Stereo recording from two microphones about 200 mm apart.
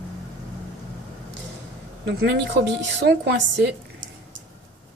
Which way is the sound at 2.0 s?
55° right (ahead or behind).